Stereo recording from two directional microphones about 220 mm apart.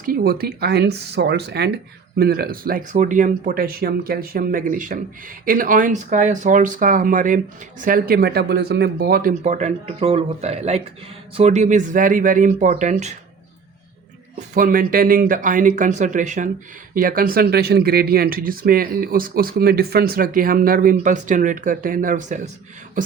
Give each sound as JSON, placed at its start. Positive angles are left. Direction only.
{"t": 0.0, "sound": "speech", "side_deg": -40}
{"t": 14.3, "sound": "speech", "side_deg": -35}